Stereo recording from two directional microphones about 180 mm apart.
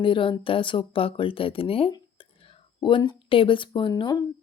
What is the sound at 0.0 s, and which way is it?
Speech, 30° left (ahead or behind).